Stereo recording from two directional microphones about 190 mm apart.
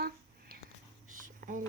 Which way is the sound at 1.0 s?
45° right (ahead or behind).